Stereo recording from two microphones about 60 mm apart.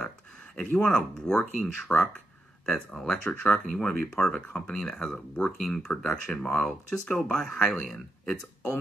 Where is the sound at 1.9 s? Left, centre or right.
Left.